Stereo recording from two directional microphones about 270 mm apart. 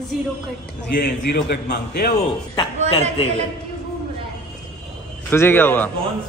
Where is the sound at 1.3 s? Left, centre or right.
Left.